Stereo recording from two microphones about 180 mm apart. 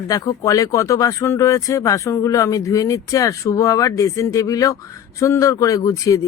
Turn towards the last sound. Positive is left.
turn(degrees=20)  # may be behind; listen again after turning